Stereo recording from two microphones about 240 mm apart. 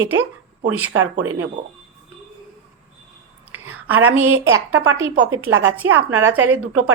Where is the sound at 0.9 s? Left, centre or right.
Right.